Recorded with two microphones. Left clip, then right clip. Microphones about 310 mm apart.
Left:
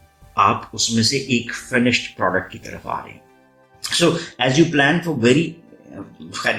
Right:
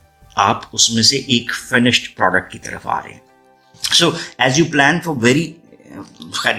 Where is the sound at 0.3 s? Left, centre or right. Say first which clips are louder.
Right 2 dB; right.